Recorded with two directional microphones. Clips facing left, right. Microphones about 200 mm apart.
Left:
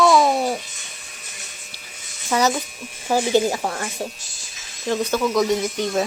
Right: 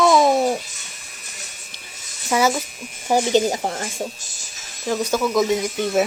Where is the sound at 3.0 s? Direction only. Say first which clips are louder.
Right 1 dB; 20° right (ahead or behind).